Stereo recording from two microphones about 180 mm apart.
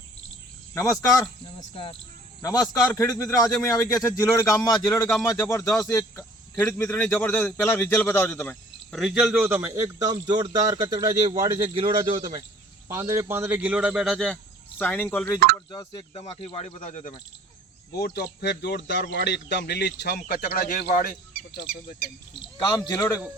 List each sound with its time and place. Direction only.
0.7 s speech: 15° left (ahead or behind)
1.7 s speech: 30° left (ahead or behind)
2.4 s a man's voice: 20° left (ahead or behind); by 14.3 s centre (ahead or behind)
14.8 s speech: 10° left (ahead or behind); by 17.2 s 45° left (ahead or behind)
17.9 s a man's voice: 55° left (ahead or behind)
22.9 s speech: 15° left (ahead or behind)